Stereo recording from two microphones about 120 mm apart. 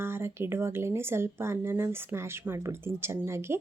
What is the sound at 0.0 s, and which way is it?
Speech, 20° right (ahead or behind).